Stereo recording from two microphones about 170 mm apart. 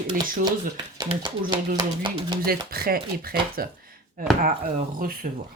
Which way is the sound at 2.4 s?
60° right (ahead or behind).